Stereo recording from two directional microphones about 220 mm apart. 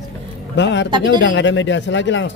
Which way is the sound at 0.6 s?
55° left (ahead or behind).